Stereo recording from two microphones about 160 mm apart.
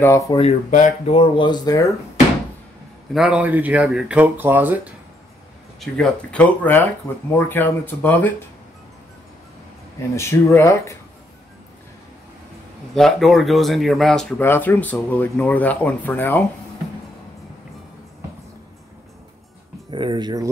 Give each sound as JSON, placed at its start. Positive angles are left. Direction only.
{"t": 0.3, "sound": "speech", "side_deg": 35}
{"t": 0.7, "sound": "speech", "side_deg": 50}
{"t": 1.1, "sound": "speech", "side_deg": 35}
{"t": 3.1, "sound": "speech", "side_deg": -5}
{"t": 5.8, "sound": "speech", "side_deg": 5}
{"t": 10.1, "sound": "speech", "side_deg": 15}
{"t": 12.9, "sound": "speech", "side_deg": 0}
{"t": 14.4, "sound": "speech", "side_deg": 15}
{"t": 19.9, "sound": "speech", "side_deg": -30}